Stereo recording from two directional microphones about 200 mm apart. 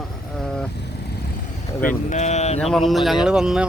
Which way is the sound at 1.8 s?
40° left (ahead or behind).